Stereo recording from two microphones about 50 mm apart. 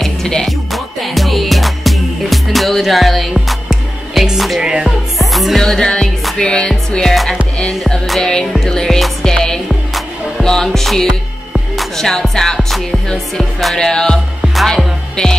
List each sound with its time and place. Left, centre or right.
0.0 s music: centre
0.5 s music: centre
4.6 s music: centre
5.2 s music: centre
5.6 s music: centre
14.4 s music: centre